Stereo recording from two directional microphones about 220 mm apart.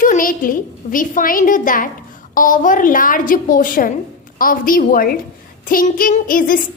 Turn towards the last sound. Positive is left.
turn(degrees=40)  # may be behind; listen again after turning